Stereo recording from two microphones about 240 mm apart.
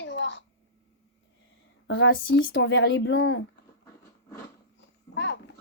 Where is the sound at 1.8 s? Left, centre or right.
Left.